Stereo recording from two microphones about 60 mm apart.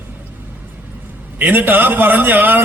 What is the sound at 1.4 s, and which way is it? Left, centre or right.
A man's voice, right.